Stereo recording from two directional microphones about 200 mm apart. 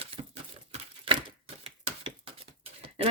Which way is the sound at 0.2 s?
30° right (ahead or behind).